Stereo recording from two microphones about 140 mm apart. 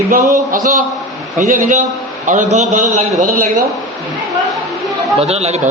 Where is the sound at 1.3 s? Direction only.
65° right (ahead or behind).